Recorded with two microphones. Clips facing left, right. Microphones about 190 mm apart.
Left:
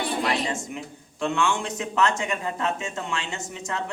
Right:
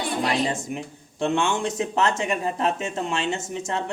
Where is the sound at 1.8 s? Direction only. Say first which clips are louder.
Left 1 dB; 30° right (ahead or behind).